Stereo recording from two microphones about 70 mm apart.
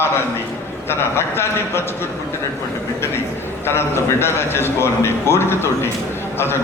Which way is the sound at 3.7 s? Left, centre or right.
Left.